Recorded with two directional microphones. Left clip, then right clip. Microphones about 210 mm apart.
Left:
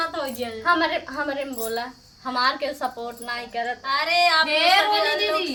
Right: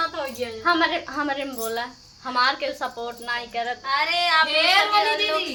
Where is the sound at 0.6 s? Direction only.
20° right (ahead or behind).